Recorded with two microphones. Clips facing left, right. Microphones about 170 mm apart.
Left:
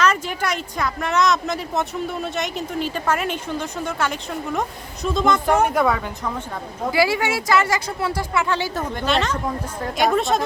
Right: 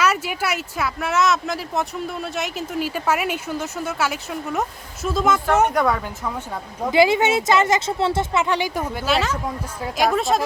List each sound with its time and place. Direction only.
0.0 s speech: 10° right (ahead or behind)
6.9 s speech: 20° right (ahead or behind); by 10.4 s centre (ahead or behind)